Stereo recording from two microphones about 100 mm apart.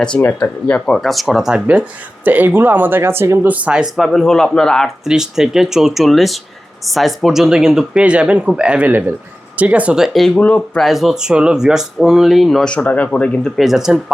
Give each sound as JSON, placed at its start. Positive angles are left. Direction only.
{"t": 0.3, "sound": "speech", "side_deg": 10}
{"t": 3.5, "sound": "speech", "side_deg": -10}
{"t": 5.0, "sound": "speech", "side_deg": -5}
{"t": 10.8, "sound": "speech", "side_deg": 0}
{"t": 13.6, "sound": "speech", "side_deg": -5}